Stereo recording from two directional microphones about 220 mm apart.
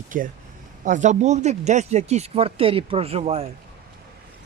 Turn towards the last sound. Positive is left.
turn(degrees=-25)  # may be behind; listen again after turning